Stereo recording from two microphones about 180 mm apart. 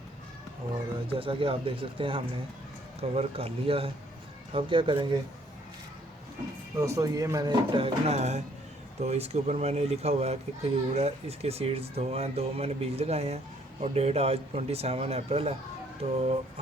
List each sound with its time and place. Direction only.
1.2 s a child's voice: 30° right (ahead or behind)
6.7 s a child's voice: 15° right (ahead or behind); by 16.4 s 35° right (ahead or behind)